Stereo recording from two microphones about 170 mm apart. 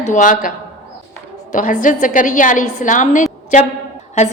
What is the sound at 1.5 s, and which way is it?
A woman's voice, 50° left (ahead or behind).